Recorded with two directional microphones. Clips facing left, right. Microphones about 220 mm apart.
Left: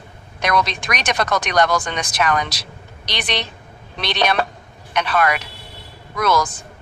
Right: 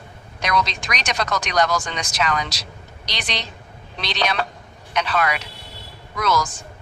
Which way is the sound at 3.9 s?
55° left (ahead or behind).